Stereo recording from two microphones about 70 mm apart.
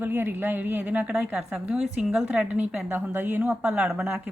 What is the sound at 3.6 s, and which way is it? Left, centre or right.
Speech, centre.